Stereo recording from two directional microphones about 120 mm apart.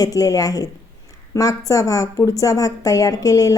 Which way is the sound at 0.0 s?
30° left (ahead or behind).